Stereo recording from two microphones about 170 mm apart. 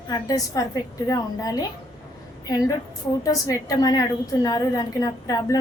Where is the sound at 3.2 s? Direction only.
20° left (ahead or behind).